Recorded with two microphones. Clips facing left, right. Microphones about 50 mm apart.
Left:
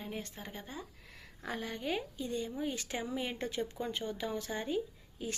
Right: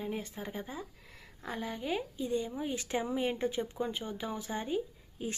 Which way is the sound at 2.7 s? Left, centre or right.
Right.